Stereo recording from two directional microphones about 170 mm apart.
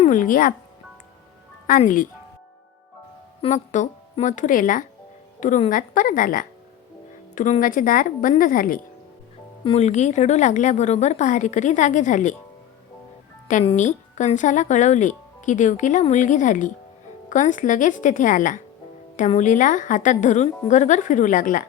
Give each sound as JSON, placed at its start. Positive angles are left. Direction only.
{"t": 0.0, "sound": "speech", "side_deg": 50}
{"t": 1.6, "sound": "speech", "side_deg": 50}
{"t": 3.4, "sound": "speech", "side_deg": 45}
{"t": 9.6, "sound": "speech", "side_deg": 40}
{"t": 13.7, "sound": "speech", "side_deg": 45}